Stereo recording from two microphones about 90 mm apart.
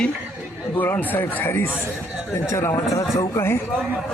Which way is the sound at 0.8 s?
25° left (ahead or behind).